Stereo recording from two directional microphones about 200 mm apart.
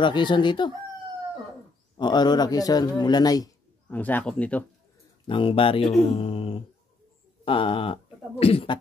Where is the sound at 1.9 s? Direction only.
20° left (ahead or behind).